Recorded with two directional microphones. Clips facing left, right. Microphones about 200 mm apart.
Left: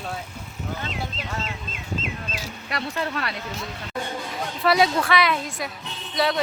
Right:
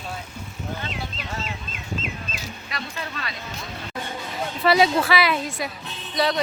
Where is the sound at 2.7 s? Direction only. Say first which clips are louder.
Left 7 dB; 65° left (ahead or behind).